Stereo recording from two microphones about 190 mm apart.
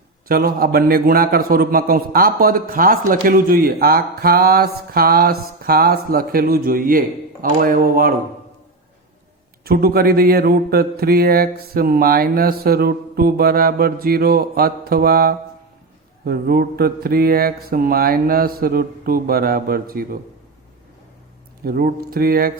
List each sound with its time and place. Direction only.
0.3 s mantra: 50° right (ahead or behind)
9.6 s mantra: 50° right (ahead or behind)
21.6 s mantra: 50° right (ahead or behind)